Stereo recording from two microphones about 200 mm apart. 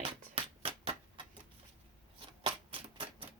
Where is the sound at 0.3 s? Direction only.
30° right (ahead or behind).